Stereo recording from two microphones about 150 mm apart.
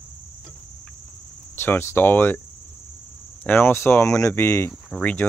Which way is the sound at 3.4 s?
15° left (ahead or behind).